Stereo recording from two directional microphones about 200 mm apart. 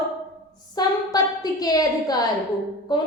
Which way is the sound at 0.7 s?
20° left (ahead or behind).